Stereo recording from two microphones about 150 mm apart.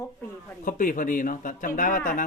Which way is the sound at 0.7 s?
65° left (ahead or behind).